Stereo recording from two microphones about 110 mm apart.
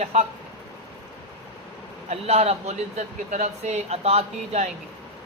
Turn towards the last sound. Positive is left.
turn(degrees=-70)  # may be behind; listen again after turning